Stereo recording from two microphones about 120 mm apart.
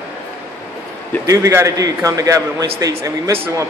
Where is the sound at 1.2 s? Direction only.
25° right (ahead or behind).